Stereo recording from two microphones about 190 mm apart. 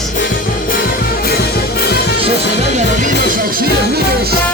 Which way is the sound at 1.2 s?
55° left (ahead or behind).